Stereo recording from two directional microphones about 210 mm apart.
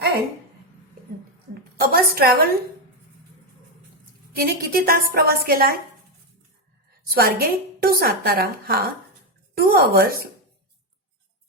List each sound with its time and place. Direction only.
1.8 s a woman's voice: 45° right (ahead or behind)
4.4 s a woman's voice: 45° right (ahead or behind)
7.1 s a woman's voice: 45° right (ahead or behind)